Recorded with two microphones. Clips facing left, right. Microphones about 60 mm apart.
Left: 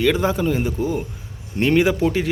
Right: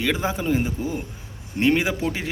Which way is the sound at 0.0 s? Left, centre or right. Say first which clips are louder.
Left 5 dB; centre.